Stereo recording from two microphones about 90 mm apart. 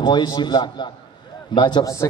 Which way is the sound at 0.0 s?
55° left (ahead or behind).